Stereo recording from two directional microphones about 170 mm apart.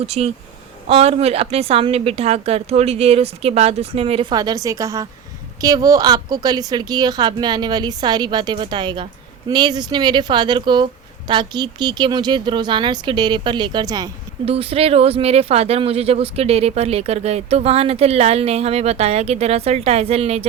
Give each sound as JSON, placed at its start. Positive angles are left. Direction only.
{"t": 0.0, "sound": "a woman's voice", "side_deg": -35}
{"t": 14.4, "sound": "speech", "side_deg": -35}